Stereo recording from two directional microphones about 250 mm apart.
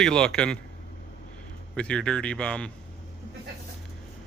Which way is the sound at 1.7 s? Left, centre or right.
Centre.